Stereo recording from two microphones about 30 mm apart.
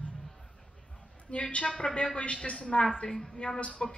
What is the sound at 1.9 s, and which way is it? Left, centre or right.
Speech, left.